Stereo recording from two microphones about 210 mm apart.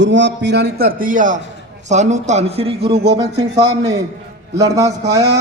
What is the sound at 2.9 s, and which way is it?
Speech, 50° right (ahead or behind).